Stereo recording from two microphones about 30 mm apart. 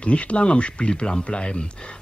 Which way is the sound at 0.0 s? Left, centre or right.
Left.